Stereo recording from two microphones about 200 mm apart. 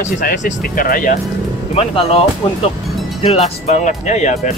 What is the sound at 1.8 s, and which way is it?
Speech, 30° left (ahead or behind).